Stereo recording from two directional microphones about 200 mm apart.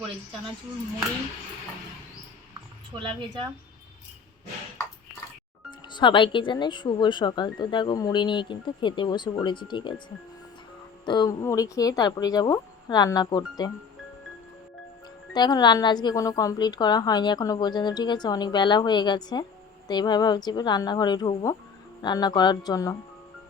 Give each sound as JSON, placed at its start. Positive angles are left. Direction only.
{"t": 3.0, "sound": "a woman's voice", "side_deg": -25}
{"t": 5.9, "sound": "speech", "side_deg": 25}
{"t": 11.0, "sound": "speech", "side_deg": 20}
{"t": 15.3, "sound": "speech", "side_deg": 20}